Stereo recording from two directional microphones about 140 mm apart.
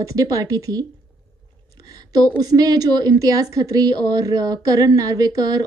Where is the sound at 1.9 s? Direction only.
25° right (ahead or behind).